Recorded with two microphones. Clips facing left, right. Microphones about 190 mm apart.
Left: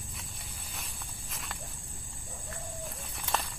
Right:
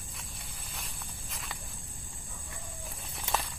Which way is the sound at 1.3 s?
Centre (ahead or behind).